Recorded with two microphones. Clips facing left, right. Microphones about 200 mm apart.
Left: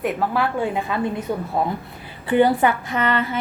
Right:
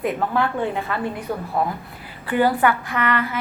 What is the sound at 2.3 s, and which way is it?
A woman's voice, 20° left (ahead or behind).